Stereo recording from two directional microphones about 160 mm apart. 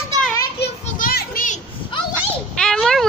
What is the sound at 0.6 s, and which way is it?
Children playing, 75° left (ahead or behind).